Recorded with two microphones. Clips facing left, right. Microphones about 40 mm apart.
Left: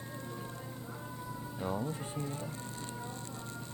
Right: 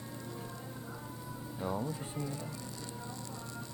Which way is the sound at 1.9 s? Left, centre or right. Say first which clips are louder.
Even; left.